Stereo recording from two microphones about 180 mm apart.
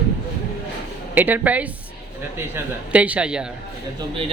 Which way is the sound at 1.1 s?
10° right (ahead or behind).